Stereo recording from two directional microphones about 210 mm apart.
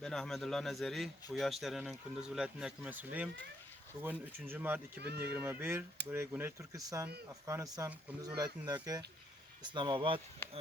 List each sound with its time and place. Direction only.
0.0 s speech: centre (ahead or behind)
4.9 s speech: 50° right (ahead or behind)
5.2 s speech: 10° right (ahead or behind); by 10.2 s 25° right (ahead or behind)